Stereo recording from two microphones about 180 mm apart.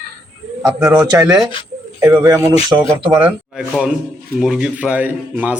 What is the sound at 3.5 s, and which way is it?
A man's voice, 5° right (ahead or behind).